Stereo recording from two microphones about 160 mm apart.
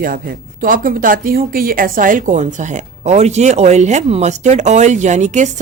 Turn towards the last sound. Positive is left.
turn(degrees=-50)  # may be behind; listen again after turning